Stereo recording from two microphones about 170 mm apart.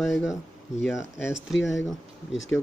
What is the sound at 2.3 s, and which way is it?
Speech, 90° left.